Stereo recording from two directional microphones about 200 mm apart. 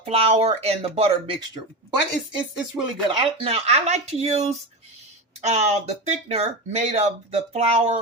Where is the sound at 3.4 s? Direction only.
30° right (ahead or behind).